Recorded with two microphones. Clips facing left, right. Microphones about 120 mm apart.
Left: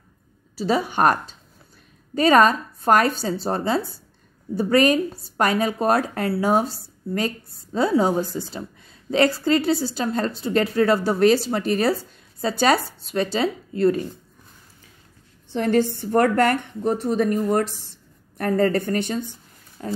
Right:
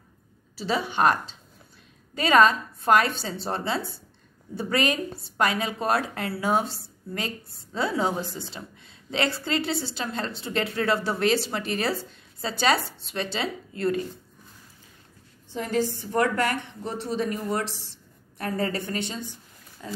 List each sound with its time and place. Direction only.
0.6 s a woman's voice: 40° left (ahead or behind)
15.5 s a woman's voice: 65° left (ahead or behind); by 19.9 s 45° left (ahead or behind)